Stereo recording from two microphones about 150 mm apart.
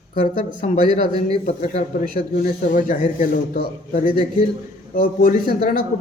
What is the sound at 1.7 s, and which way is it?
A man's voice, 65° left (ahead or behind).